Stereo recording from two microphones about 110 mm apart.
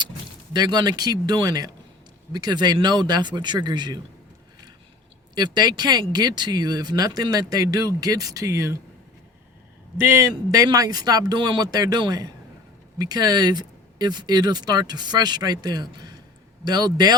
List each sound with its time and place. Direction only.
0.5 s speech: 40° right (ahead or behind)
5.3 s speech: 40° right (ahead or behind)
10.0 s speech: 25° right (ahead or behind)